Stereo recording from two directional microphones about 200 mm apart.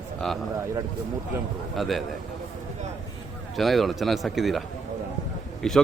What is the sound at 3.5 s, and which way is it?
A man's voice, centre (ahead or behind).